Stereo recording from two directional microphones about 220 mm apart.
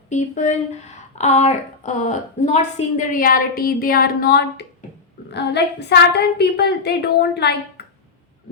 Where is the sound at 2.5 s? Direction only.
35° left (ahead or behind).